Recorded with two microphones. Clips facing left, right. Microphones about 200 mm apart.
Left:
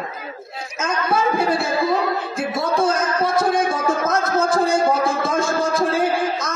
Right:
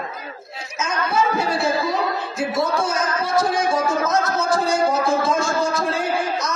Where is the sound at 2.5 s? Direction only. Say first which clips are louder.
Left 3 dB; 55° left (ahead or behind).